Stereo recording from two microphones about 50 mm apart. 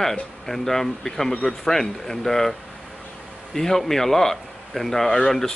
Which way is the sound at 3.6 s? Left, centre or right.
Centre.